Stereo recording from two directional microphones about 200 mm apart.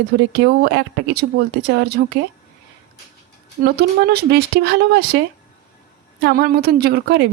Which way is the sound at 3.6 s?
50° right (ahead or behind).